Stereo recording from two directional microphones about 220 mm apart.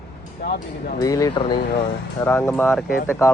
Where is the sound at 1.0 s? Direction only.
15° left (ahead or behind).